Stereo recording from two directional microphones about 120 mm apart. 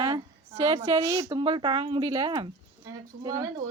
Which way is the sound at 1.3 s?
40° right (ahead or behind).